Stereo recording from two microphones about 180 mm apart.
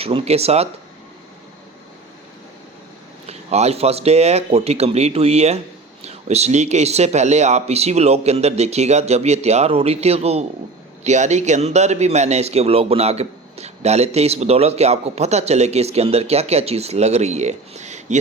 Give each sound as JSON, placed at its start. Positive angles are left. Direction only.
{"t": 0.0, "sound": "a man's voice", "side_deg": -30}
{"t": 3.2, "sound": "a man's voice", "side_deg": -35}